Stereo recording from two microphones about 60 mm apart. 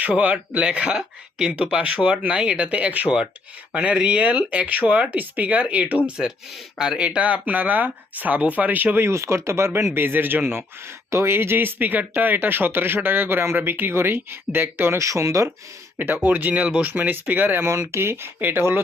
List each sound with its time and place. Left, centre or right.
0.0 s speech: right
6.1 s speech: centre; by 9.0 s right
9.0 s speech: right
9.9 s speech: right
11.1 s speech: right
14.9 s speech: right
16.0 s speech: right
16.9 s speech: right
17.7 s speech: right